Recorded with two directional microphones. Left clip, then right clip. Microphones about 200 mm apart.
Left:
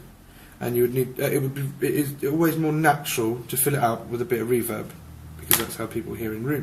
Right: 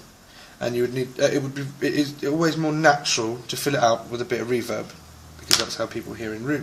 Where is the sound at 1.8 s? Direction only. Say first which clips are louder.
Right 1 dB; 35° right (ahead or behind).